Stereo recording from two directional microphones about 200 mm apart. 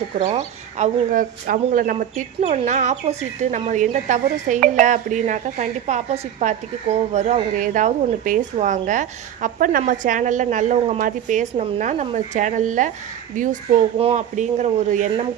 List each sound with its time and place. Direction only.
0.2 s speech: 35° right (ahead or behind)